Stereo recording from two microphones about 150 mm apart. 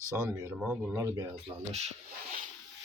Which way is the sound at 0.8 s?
15° right (ahead or behind).